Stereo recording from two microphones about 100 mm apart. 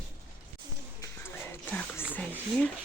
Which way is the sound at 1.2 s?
20° left (ahead or behind).